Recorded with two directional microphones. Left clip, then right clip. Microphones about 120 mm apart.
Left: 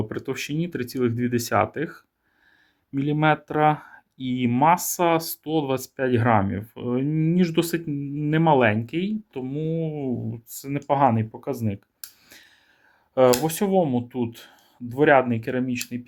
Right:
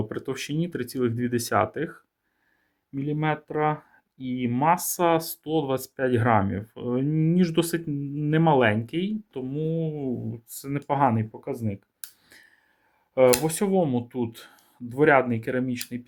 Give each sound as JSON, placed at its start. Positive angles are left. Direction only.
{"t": 0.0, "sound": "speech", "side_deg": 5}
{"t": 2.9, "sound": "speech", "side_deg": 35}
{"t": 11.3, "sound": "speech", "side_deg": 20}
{"t": 13.4, "sound": "speech", "side_deg": 5}